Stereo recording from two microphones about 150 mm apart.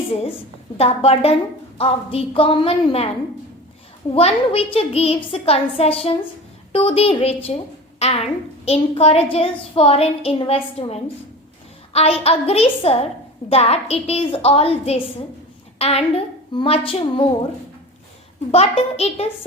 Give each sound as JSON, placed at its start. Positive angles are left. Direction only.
{"t": 0.8, "sound": "a child's voice", "side_deg": 40}
{"t": 4.1, "sound": "a child's voice", "side_deg": 40}
{"t": 18.5, "sound": "a child's voice", "side_deg": 40}